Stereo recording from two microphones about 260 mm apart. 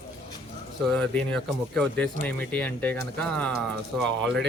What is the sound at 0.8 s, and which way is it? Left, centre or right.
Speech, centre.